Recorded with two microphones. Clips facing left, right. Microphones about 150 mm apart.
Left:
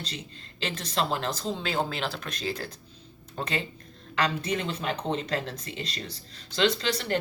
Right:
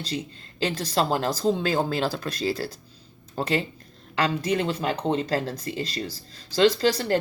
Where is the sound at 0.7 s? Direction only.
35° right (ahead or behind).